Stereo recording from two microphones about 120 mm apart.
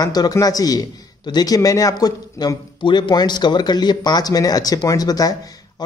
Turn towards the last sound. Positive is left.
turn(degrees=30)  # may be behind; listen again after turning